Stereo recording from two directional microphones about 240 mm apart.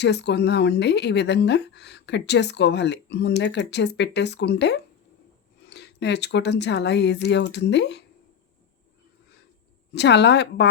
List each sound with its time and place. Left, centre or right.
0.0 s speech: left
9.9 s speech: left